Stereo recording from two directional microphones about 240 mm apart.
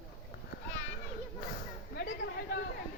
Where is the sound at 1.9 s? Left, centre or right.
Left.